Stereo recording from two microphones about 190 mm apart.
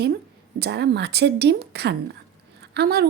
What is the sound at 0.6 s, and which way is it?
Speech, 65° right (ahead or behind).